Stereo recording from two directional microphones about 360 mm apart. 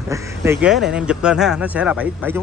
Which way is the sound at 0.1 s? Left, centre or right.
Centre.